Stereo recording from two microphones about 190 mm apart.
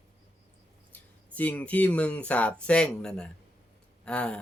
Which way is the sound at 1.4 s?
10° left (ahead or behind).